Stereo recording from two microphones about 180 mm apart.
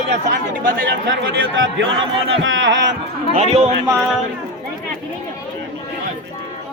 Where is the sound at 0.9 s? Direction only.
75° right (ahead or behind).